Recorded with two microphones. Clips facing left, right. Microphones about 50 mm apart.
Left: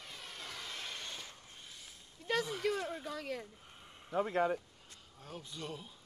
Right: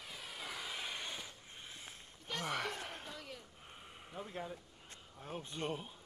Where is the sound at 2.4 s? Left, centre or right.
Right.